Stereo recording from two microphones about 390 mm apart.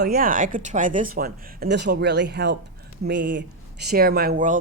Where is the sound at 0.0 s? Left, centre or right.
Right.